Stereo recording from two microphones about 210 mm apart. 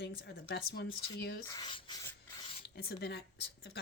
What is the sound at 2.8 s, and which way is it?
Speech, 50° left (ahead or behind).